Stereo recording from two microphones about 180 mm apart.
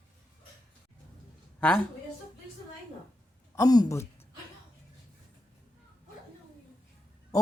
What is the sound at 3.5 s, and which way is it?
Speech, 20° left (ahead or behind).